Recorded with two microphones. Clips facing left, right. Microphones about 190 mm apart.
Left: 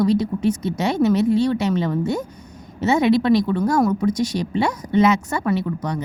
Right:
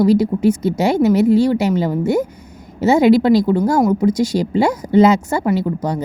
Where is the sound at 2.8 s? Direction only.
30° right (ahead or behind).